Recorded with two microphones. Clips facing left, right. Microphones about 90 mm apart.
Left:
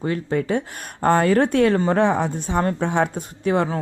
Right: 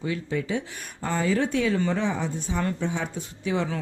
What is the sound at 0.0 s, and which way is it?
Speech, 50° left (ahead or behind).